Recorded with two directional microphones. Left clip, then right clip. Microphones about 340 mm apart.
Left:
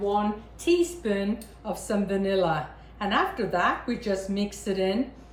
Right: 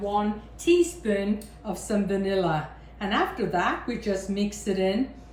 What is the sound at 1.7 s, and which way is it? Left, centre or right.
Speech, centre.